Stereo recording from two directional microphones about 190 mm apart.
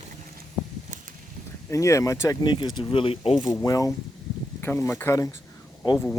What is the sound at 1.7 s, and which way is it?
Speech, 15° left (ahead or behind).